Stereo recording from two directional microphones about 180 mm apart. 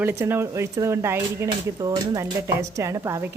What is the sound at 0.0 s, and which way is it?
Speech, 10° right (ahead or behind).